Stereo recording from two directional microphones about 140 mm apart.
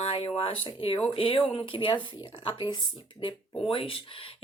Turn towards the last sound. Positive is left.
turn(degrees=40)  # may be behind; listen again after turning